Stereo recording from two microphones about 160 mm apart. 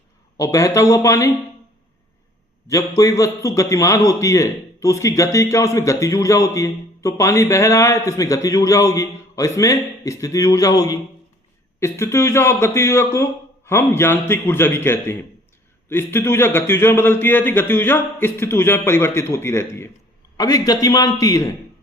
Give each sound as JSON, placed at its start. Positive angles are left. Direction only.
{"t": 0.3, "sound": "a man's voice", "side_deg": 20}
{"t": 2.6, "sound": "a man's voice", "side_deg": 20}